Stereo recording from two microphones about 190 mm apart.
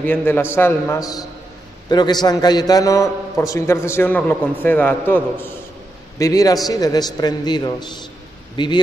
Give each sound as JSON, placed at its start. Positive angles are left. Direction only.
{"t": 0.0, "sound": "a man's voice", "side_deg": 10}